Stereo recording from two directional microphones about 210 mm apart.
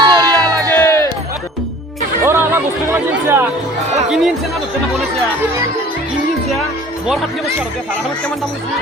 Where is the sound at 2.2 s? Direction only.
10° right (ahead or behind).